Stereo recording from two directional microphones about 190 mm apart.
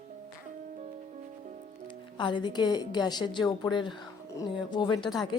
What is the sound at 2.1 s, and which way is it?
Speech, 25° left (ahead or behind).